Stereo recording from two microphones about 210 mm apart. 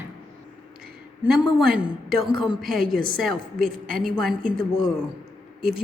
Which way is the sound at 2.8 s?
45° right (ahead or behind).